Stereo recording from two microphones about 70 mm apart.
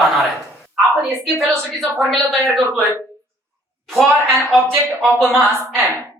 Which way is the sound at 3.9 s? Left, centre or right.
Centre.